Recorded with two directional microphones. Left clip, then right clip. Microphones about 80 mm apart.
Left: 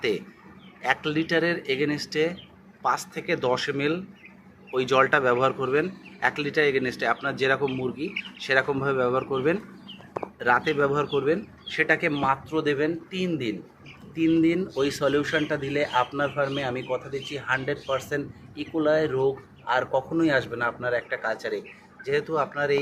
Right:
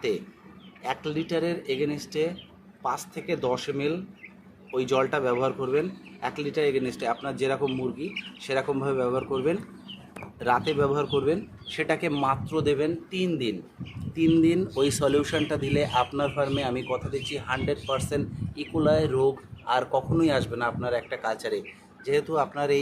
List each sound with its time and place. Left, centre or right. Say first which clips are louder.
0.8 s speech: left 5 dB; centre
3.5 s speech: left 3 dB; centre
11.7 s speech: left 4 dB; right
14.2 s speech: even; right